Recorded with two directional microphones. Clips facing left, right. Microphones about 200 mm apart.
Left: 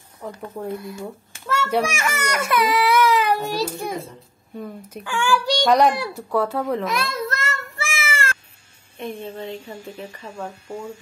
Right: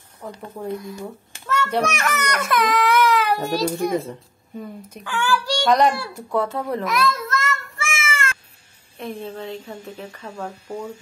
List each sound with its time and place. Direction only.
0.2 s speech: 5° left (ahead or behind)
1.4 s a child's voice: 10° left (ahead or behind)
6.8 s a sound: 30° left (ahead or behind)
8.9 s speech: centre (ahead or behind)